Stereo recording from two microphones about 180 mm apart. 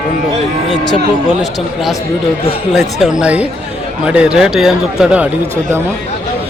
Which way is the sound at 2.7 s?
Centre (ahead or behind).